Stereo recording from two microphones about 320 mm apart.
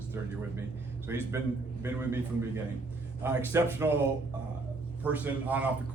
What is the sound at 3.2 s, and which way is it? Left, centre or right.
Speech, centre.